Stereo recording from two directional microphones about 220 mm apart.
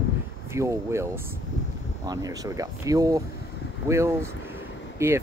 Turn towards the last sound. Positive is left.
turn(degrees=-10)  # may be behind; listen again after turning